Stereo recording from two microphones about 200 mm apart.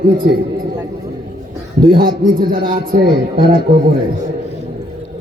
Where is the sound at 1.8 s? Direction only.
45° right (ahead or behind).